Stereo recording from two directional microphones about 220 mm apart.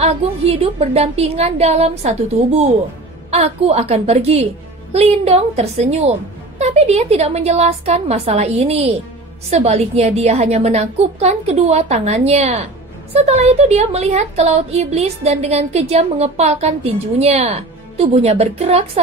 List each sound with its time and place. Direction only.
0.0 s a woman's voice: 25° right (ahead or behind)
3.3 s a woman's voice: 30° right (ahead or behind)